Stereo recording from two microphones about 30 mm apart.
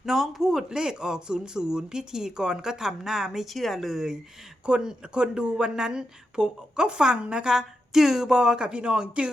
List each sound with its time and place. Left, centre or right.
0.0 s speech: centre
0.7 s speech: right
3.4 s speech: centre
3.8 s speech: centre
4.6 s speech: right
7.4 s speech: centre; by 9.3 s right